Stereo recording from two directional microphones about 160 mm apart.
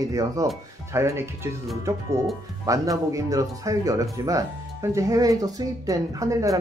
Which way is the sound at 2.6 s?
20° right (ahead or behind).